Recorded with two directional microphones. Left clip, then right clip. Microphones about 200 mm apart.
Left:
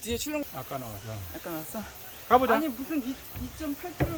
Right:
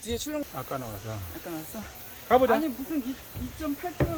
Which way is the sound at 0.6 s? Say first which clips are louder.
Right 2 dB; 5° right (ahead or behind).